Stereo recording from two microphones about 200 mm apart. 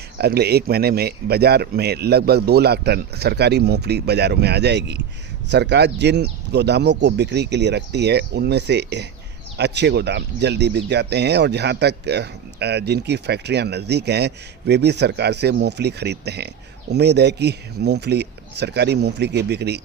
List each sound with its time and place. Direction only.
0.2 s speech: 55° right (ahead or behind)